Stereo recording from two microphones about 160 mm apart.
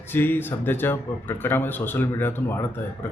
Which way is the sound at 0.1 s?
15° left (ahead or behind).